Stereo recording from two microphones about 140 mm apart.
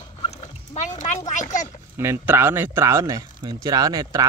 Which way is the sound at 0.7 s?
60° left (ahead or behind).